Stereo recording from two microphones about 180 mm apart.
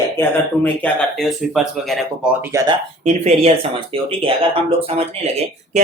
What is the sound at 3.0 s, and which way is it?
Speech, 35° right (ahead or behind).